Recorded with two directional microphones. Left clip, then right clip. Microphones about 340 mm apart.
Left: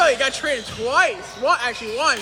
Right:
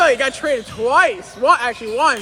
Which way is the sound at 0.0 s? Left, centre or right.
Centre.